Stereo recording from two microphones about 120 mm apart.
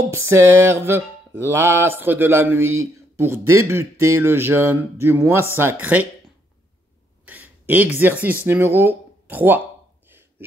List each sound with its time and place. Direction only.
0.1 s mantra: 25° right (ahead or behind)
5.6 s speech: 15° right (ahead or behind)
7.2 s speech: 15° right (ahead or behind)